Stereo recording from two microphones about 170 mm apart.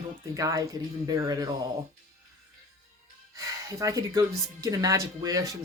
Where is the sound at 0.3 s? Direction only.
20° right (ahead or behind).